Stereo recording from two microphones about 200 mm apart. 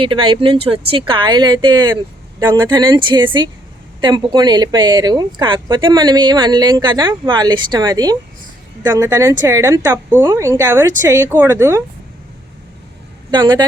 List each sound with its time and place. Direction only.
0.0 s speech: 25° right (ahead or behind)
13.3 s speech: 20° right (ahead or behind)